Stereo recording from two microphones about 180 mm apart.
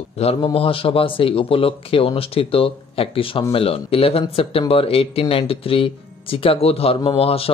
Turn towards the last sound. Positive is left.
turn(degrees=30)  # may be behind; listen again after turning